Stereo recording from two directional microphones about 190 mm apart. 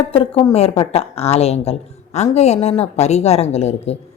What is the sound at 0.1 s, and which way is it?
A woman's voice, 25° left (ahead or behind).